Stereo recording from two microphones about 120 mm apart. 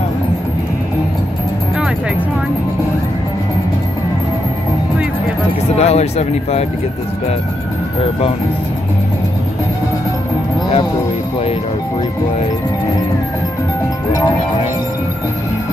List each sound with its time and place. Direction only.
5.8 s speech: 60° left (ahead or behind)